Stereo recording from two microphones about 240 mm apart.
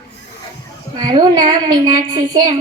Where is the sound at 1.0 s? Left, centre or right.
Centre.